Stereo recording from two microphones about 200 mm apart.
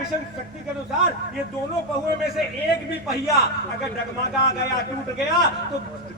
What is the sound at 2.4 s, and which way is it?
Speech, centre (ahead or behind).